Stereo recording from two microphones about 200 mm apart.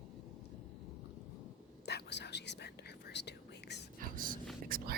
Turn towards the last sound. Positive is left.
turn(degrees=-45)  # may be behind; listen again after turning